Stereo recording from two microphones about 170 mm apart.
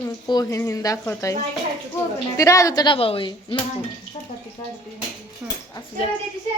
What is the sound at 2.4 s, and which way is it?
Speech, 20° left (ahead or behind).